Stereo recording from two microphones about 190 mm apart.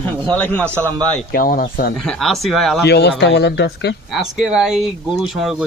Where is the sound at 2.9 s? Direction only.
60° left (ahead or behind).